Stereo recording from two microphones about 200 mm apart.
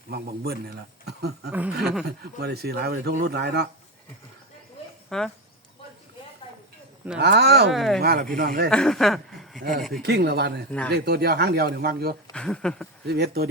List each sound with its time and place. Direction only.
0.1 s speech: 55° right (ahead or behind)
1.8 s speech: centre (ahead or behind)
2.0 s a man's voice: 55° right (ahead or behind)
5.0 s speech: centre (ahead or behind)
7.2 s speech: 55° right (ahead or behind)
7.7 s speech: centre (ahead or behind)
8.0 s a man's voice: 50° right (ahead or behind)
8.7 s speech: 5° left (ahead or behind)
10.0 s speech: 55° right (ahead or behind)
10.7 s speech: 5° left (ahead or behind)
10.9 s a man's voice: 55° right (ahead or behind)
12.3 s speech: 5° left (ahead or behind)
13.1 s a man's voice: 55° right (ahead or behind)